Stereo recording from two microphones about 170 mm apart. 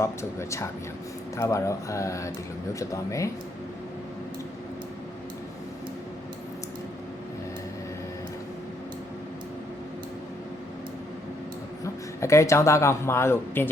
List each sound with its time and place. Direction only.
0.0 s speech: 15° left (ahead or behind)
12.2 s speech: 15° left (ahead or behind)